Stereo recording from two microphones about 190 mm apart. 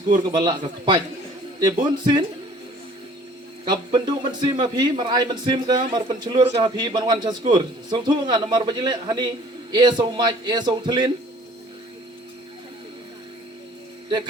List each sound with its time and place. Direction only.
0.1 s a man's voice: 25° right (ahead or behind)
3.7 s a man's voice: 25° right (ahead or behind)